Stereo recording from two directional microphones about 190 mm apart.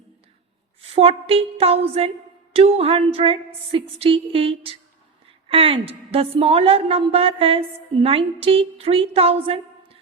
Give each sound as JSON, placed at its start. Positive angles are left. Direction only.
{"t": 0.8, "sound": "speech", "side_deg": -30}
{"t": 2.5, "sound": "a sound", "side_deg": -30}
{"t": 5.5, "sound": "speech", "side_deg": -30}